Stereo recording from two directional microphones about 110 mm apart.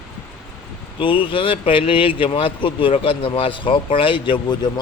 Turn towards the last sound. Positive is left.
turn(degrees=45)  # may be behind; listen again after turning